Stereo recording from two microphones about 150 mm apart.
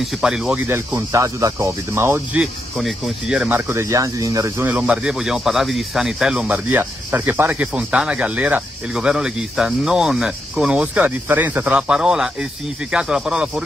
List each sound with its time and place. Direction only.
0.0 s speech: 5° right (ahead or behind)
0.7 s speech: 15° right (ahead or behind)
2.4 s speech: 5° right (ahead or behind); by 4.6 s 25° right (ahead or behind)
4.6 s speech: 10° right (ahead or behind)